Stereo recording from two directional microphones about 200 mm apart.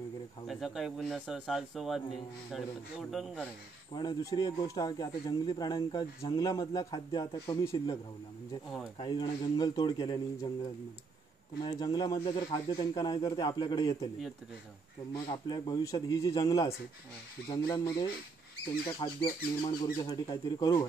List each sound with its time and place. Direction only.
0.5 s speech: centre (ahead or behind)
3.9 s speech: 20° left (ahead or behind)
11.6 s speech: 20° left (ahead or behind)
15.2 s a man's voice: 20° left (ahead or behind)
18.9 s speech: 20° left (ahead or behind)